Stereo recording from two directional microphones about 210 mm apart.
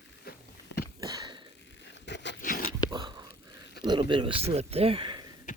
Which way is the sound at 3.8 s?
20° right (ahead or behind).